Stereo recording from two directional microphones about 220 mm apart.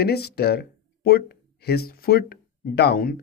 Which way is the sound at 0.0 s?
45° left (ahead or behind).